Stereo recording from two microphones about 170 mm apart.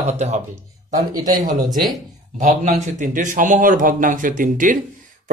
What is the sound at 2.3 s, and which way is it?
Speech, 45° right (ahead or behind).